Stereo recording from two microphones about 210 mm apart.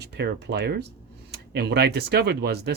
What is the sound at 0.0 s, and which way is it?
Speech, 50° right (ahead or behind).